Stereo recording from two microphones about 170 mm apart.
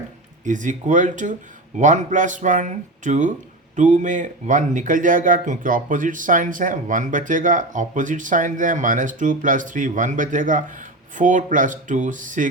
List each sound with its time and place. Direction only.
0.4 s speech: 50° right (ahead or behind)